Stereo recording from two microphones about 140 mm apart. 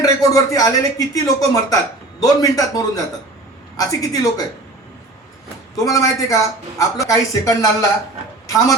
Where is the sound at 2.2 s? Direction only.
25° left (ahead or behind).